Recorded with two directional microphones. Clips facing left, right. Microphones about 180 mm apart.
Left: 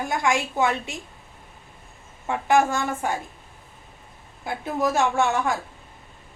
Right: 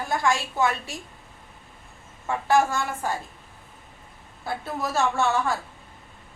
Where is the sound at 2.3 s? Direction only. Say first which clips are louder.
Left 1 dB; 15° left (ahead or behind).